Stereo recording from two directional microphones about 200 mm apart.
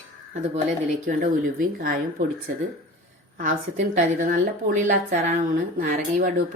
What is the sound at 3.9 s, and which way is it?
Speech, 40° right (ahead or behind).